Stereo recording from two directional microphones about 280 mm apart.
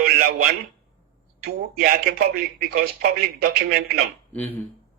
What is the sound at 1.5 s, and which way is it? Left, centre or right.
A man's voice, right.